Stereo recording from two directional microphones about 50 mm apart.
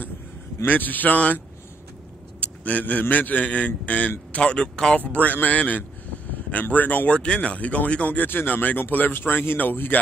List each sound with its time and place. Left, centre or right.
0.7 s speech: left
2.4 s a man's voice: left
4.9 s speech: left
7.2 s a man's voice: left
8.3 s speech: left